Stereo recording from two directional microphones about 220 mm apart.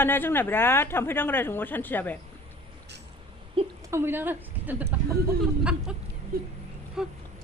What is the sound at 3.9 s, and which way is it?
Speech, 10° right (ahead or behind).